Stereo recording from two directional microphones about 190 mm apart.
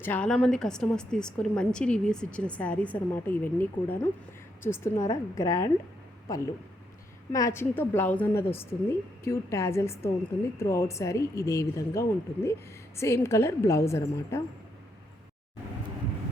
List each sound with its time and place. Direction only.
0.0 s a woman's voice: 5° left (ahead or behind)